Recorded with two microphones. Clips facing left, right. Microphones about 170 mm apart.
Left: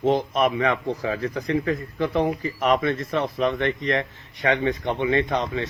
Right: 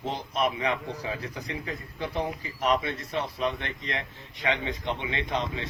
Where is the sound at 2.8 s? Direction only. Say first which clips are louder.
Left 8 dB; 90° left.